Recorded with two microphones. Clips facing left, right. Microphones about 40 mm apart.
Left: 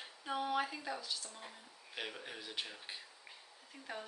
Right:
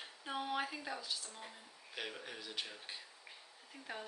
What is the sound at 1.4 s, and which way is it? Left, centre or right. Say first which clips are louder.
Speech: even; centre.